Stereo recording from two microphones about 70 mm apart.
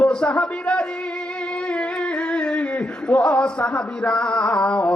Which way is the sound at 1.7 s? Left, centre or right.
Centre.